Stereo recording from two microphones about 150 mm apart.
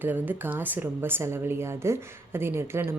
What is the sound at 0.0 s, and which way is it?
A woman's voice, 15° right (ahead or behind).